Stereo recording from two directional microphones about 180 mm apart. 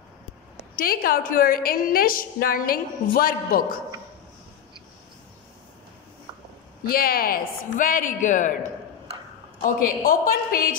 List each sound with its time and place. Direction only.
0.7 s a woman's voice: 50° left (ahead or behind)
6.8 s a woman's voice: 55° left (ahead or behind)
9.6 s a woman's voice: 50° left (ahead or behind)